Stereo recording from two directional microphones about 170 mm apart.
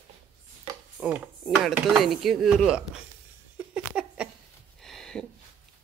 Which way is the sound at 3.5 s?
5° right (ahead or behind).